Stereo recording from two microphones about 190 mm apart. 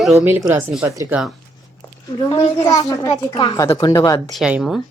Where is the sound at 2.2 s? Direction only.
25° left (ahead or behind).